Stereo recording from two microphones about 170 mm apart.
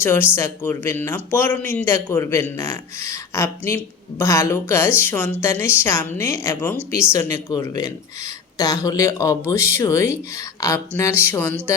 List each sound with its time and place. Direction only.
0.0 s speech: 15° left (ahead or behind)